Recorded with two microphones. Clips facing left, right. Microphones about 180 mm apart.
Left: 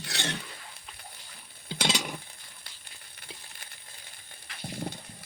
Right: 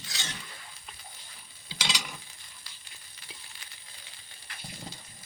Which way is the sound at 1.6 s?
55° left (ahead or behind).